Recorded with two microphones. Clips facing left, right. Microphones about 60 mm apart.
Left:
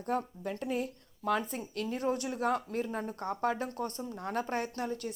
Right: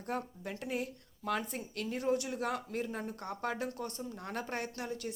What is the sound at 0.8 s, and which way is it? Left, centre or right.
A woman's voice, left.